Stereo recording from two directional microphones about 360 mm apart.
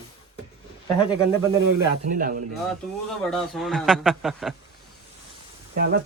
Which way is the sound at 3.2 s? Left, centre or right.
Centre.